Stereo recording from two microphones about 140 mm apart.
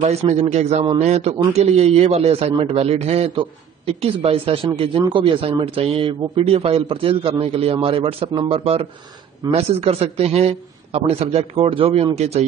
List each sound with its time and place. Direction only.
0.0 s a man's voice: 50° right (ahead or behind)